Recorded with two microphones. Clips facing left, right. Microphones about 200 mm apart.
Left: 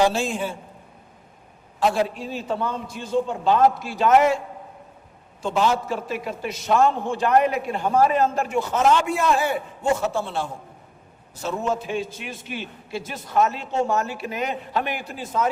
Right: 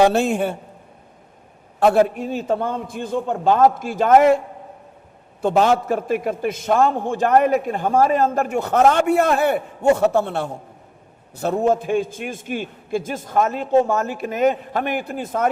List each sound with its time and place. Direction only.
0.0 s a man's voice: 60° right (ahead or behind)
1.8 s a man's voice: 55° right (ahead or behind)
5.4 s a man's voice: 55° right (ahead or behind)